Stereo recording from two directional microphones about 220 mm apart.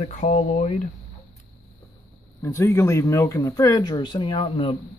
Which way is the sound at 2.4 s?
10° left (ahead or behind).